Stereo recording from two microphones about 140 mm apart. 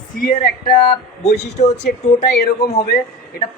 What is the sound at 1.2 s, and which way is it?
Speech, 55° left (ahead or behind).